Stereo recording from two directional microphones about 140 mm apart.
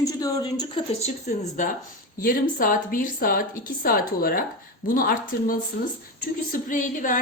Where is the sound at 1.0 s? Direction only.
60° left (ahead or behind).